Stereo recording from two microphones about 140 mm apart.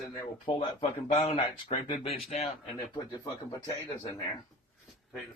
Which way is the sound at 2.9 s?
25° left (ahead or behind).